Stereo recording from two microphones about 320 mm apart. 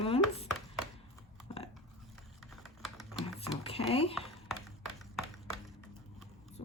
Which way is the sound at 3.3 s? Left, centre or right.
Centre.